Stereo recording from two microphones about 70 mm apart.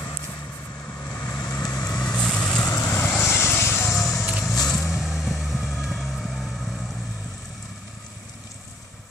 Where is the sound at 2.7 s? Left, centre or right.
Left.